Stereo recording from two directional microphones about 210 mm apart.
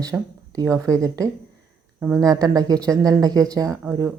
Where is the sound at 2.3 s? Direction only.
20° right (ahead or behind).